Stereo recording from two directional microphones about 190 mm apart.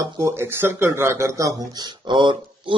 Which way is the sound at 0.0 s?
15° right (ahead or behind).